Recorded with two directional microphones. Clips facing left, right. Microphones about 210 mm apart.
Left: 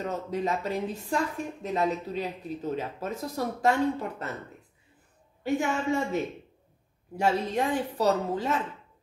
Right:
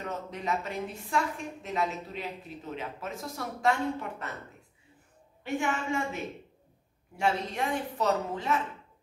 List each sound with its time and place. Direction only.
0.0 s a woman's voice: 35° left (ahead or behind)
5.4 s a woman's voice: 40° left (ahead or behind)